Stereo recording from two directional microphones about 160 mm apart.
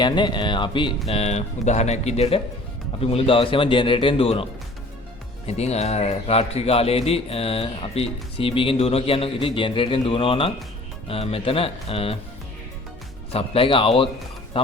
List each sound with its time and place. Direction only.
0.0 s a man's voice: 30° left (ahead or behind)
5.5 s a man's voice: 40° left (ahead or behind)
13.3 s a man's voice: 35° left (ahead or behind)